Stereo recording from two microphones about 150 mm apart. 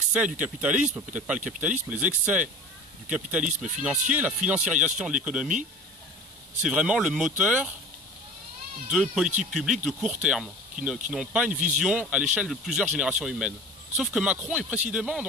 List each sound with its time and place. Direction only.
0.1 s speech: 10° right (ahead or behind)
3.4 s speech: 55° right (ahead or behind)
4.1 s speech: 10° right (ahead or behind)
6.6 s speech: 5° right (ahead or behind)
8.9 s speech: centre (ahead or behind)
11.5 s speech: 55° right (ahead or behind)
11.8 s speech: 10° right (ahead or behind)